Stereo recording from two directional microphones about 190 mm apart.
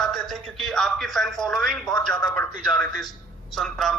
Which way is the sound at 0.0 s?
5° left (ahead or behind).